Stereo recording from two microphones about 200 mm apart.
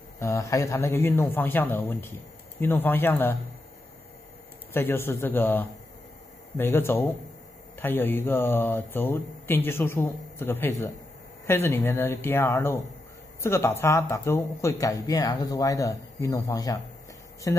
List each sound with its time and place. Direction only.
0.2 s speech: 15° left (ahead or behind)
4.7 s speech: 10° left (ahead or behind)